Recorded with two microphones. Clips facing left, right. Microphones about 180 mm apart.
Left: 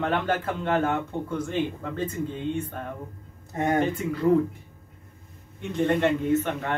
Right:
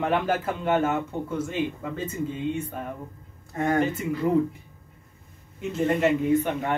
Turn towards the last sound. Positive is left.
turn(degrees=-15)  # may be behind; listen again after turning